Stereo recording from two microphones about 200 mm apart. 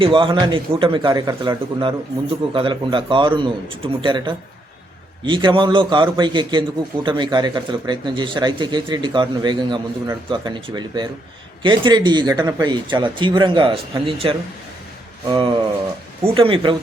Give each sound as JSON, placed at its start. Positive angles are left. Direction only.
{"t": 0.0, "sound": "a man's voice", "side_deg": -25}